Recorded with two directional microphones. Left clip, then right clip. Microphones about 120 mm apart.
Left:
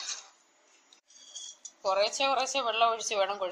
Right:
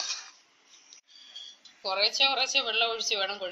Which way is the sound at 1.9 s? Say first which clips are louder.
Right 2 dB; 90° left.